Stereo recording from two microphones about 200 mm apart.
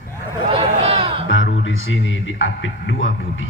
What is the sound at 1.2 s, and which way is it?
A man's voice, 70° left (ahead or behind).